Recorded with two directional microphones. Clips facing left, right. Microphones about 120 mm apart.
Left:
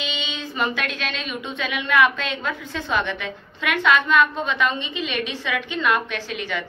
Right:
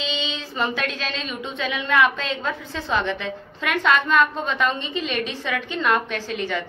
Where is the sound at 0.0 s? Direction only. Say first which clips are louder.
Right 2 dB; 30° right (ahead or behind).